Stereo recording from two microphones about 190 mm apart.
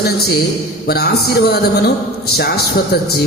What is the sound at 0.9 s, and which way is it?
A man's voice, 55° left (ahead or behind).